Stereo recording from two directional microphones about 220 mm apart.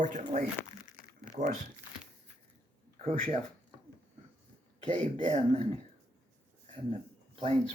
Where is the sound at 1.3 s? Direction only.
35° right (ahead or behind).